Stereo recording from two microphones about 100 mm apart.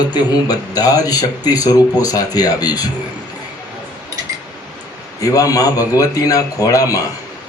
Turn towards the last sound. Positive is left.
turn(degrees=35)  # may be behind; listen again after turning